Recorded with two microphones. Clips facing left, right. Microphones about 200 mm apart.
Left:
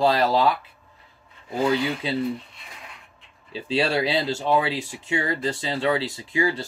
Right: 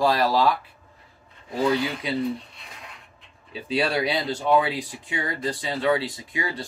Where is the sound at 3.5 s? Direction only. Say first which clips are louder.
Left 1 dB; 25° left (ahead or behind).